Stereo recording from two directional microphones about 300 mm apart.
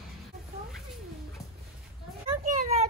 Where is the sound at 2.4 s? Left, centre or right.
Right.